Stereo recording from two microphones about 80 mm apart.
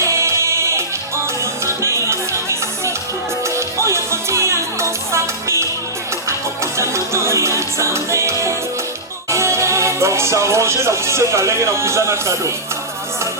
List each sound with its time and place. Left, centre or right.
0.0 s music: right
9.3 s speech: right